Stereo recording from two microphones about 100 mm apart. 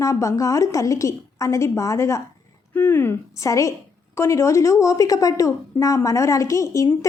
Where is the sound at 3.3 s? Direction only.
30° left (ahead or behind).